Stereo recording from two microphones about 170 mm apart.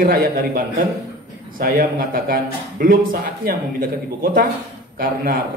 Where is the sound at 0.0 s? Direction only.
55° right (ahead or behind).